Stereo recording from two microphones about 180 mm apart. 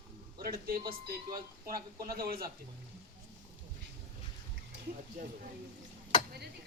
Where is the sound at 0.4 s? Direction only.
55° right (ahead or behind).